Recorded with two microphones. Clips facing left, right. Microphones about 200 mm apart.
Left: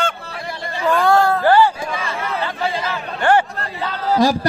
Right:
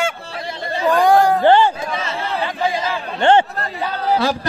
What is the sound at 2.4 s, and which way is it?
Chatter, 15° right (ahead or behind).